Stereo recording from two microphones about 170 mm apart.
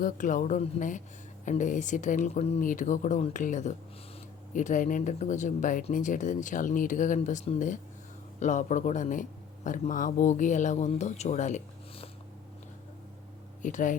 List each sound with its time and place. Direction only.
0.0 s speech: 50° left (ahead or behind)
2.6 s speech: 50° left (ahead or behind)
13.6 s speech: 50° left (ahead or behind)